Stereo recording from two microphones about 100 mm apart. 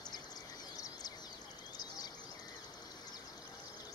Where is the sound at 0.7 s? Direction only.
35° left (ahead or behind).